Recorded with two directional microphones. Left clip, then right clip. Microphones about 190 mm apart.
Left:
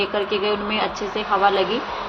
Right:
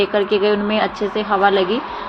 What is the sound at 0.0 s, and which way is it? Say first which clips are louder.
A woman's voice: right 5 dB; 30° right (ahead or behind).